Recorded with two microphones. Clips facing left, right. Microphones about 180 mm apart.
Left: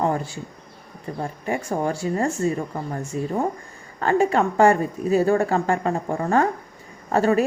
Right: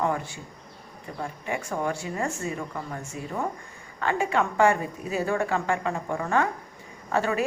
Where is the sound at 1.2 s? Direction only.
35° left (ahead or behind).